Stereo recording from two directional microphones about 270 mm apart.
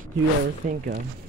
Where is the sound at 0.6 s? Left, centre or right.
Right.